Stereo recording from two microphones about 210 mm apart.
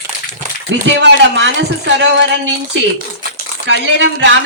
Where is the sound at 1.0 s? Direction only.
55° right (ahead or behind).